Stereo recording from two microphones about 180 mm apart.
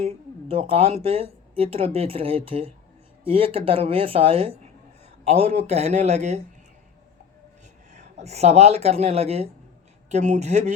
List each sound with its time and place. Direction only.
0.0 s speech: 35° right (ahead or behind)
7.9 s speech: 35° right (ahead or behind)